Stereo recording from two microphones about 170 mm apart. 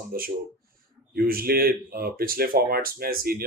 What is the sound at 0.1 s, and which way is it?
Speech, 60° right (ahead or behind).